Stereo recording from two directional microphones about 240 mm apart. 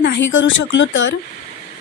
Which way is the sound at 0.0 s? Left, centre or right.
Left.